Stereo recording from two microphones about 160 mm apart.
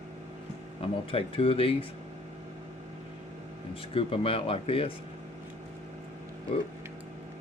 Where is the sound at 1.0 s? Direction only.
35° left (ahead or behind).